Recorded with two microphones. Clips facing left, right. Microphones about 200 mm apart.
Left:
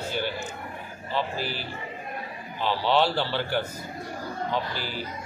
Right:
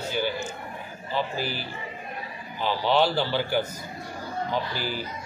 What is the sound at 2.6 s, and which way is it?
A man's voice, centre (ahead or behind).